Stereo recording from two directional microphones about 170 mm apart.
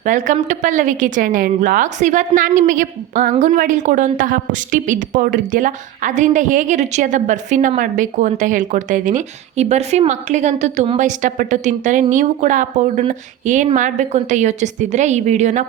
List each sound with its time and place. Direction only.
0.0 s a woman's voice: 45° right (ahead or behind)